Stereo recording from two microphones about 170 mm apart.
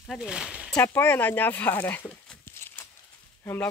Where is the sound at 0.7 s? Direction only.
10° left (ahead or behind).